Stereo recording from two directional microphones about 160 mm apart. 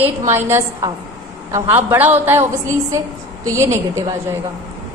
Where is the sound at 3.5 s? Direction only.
20° right (ahead or behind).